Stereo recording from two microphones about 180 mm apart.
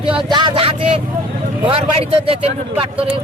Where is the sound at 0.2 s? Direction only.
25° right (ahead or behind).